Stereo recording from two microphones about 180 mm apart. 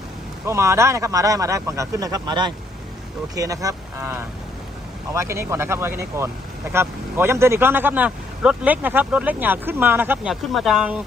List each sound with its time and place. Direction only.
0.4 s speech: 15° right (ahead or behind)